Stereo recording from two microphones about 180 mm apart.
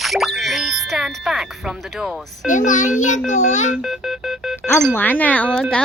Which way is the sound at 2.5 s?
45° left (ahead or behind).